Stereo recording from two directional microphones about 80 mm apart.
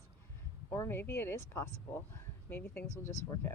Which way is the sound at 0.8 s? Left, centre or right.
Left.